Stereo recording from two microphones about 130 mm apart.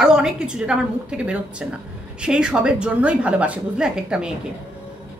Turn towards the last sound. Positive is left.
turn(degrees=-5)  # may be behind; listen again after turning